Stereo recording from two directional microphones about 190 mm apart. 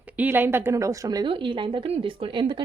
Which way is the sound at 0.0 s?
10° right (ahead or behind).